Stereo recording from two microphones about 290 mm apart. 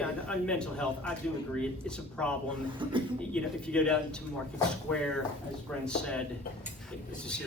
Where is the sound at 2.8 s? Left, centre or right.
Centre.